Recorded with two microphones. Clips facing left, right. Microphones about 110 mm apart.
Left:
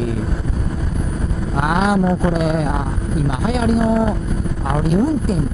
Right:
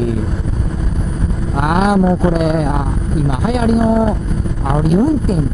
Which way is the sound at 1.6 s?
15° right (ahead or behind).